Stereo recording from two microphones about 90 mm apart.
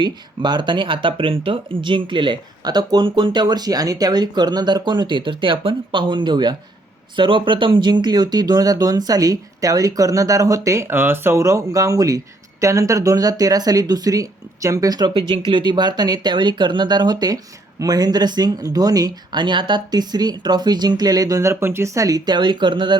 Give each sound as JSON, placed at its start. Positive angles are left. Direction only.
{"t": 0.0, "sound": "speech", "side_deg": -60}
{"t": 7.2, "sound": "speech", "side_deg": -70}
{"t": 15.3, "sound": "speech", "side_deg": -65}